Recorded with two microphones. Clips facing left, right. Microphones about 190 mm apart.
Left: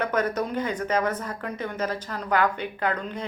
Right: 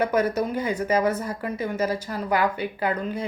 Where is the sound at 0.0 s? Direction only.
10° right (ahead or behind).